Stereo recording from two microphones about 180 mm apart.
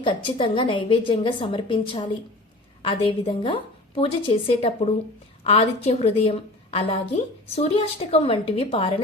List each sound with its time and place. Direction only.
0.0 s a woman's voice: 30° left (ahead or behind)